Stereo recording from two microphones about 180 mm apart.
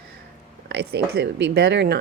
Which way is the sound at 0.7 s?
60° right (ahead or behind).